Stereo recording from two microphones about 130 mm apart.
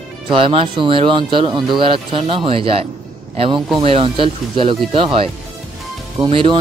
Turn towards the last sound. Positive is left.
turn(degrees=-40)  # may be behind; listen again after turning